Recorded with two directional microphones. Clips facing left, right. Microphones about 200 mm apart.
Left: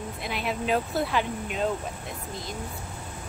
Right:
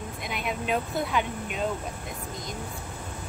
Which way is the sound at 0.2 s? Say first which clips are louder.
Left 2 dB; centre (ahead or behind).